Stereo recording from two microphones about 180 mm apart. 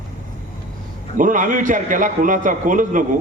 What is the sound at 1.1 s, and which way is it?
A man's voice, 45° right (ahead or behind).